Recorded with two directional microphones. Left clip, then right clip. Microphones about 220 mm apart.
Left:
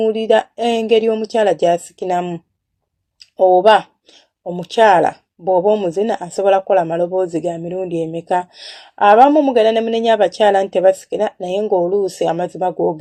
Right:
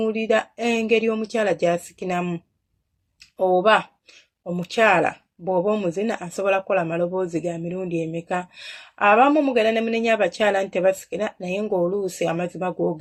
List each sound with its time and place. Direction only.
0.0 s speech: 15° left (ahead or behind)